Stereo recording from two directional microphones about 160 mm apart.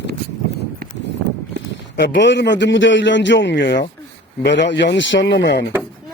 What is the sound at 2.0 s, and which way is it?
Speech, 90° left.